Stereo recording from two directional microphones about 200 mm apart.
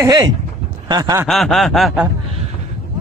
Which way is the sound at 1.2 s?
Centre (ahead or behind).